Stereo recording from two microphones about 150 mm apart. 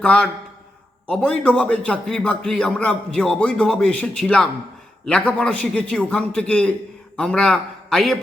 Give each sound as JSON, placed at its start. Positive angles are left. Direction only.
{"t": 0.0, "sound": "a man's voice", "side_deg": 10}